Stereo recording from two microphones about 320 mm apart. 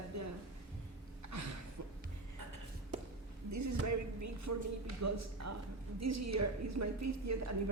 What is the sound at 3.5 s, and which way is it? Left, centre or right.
A woman's voice, right.